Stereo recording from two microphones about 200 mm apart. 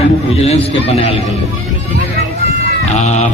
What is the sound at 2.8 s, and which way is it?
Speech, 35° left (ahead or behind).